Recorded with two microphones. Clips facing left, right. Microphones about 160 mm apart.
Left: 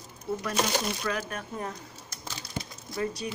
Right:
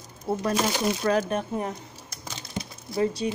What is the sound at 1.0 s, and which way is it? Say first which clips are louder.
Speech: right 8 dB; 40° right (ahead or behind).